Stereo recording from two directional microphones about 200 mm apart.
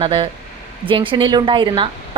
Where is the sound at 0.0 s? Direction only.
25° right (ahead or behind).